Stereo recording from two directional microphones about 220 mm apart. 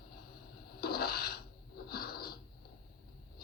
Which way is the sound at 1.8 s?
45° left (ahead or behind).